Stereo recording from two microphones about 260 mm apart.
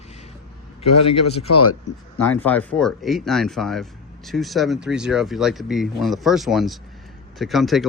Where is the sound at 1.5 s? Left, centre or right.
Left.